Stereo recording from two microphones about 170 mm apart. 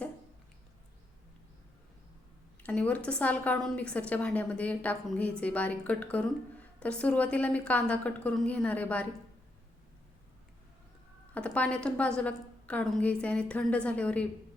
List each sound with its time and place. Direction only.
2.6 s a woman's voice: 10° left (ahead or behind)
11.3 s a woman's voice: 5° left (ahead or behind)